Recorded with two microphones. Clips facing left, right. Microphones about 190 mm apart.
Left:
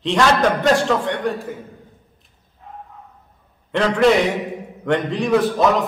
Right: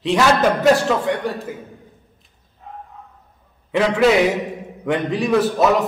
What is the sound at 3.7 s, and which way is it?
A man's voice, 5° right (ahead or behind).